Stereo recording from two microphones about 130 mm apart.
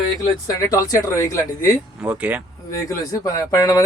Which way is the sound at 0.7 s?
25° left (ahead or behind).